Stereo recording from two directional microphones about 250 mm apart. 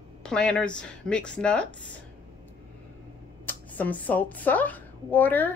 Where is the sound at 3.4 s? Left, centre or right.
Centre.